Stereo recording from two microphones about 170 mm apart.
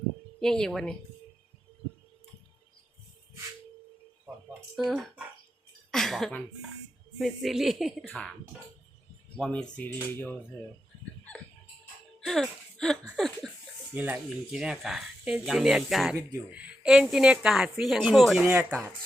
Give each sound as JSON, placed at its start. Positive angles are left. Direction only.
{"t": 0.3, "sound": "speech", "side_deg": 5}
{"t": 4.7, "sound": "speech", "side_deg": 0}
{"t": 9.4, "sound": "speech", "side_deg": 5}
{"t": 9.7, "sound": "a sound", "side_deg": 10}
{"t": 12.2, "sound": "speech", "side_deg": 0}
{"t": 13.9, "sound": "speech", "side_deg": -10}
{"t": 18.4, "sound": "speech", "side_deg": -10}